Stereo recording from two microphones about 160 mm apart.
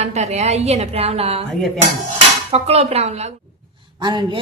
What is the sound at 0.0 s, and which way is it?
A woman's voice, 45° right (ahead or behind).